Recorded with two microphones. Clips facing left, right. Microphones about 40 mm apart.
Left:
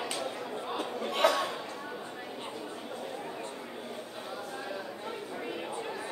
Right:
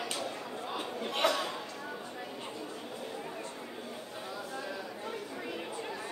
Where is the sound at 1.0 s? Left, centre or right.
Centre.